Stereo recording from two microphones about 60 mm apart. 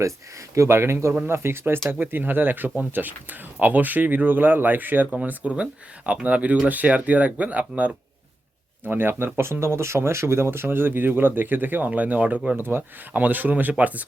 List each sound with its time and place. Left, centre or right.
0.5 s speech: right
8.8 s speech: right
12.5 s speech: right